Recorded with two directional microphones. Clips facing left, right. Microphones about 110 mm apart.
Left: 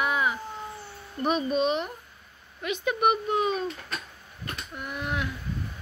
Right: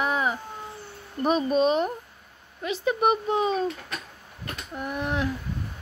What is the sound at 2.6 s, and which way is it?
Speech, 30° right (ahead or behind).